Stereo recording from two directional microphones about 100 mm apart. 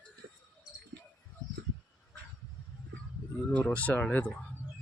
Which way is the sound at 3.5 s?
15° left (ahead or behind).